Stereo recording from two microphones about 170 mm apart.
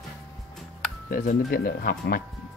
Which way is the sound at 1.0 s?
55° left (ahead or behind).